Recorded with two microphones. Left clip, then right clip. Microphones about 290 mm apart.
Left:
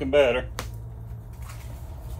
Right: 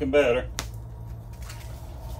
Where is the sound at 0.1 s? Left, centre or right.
Left.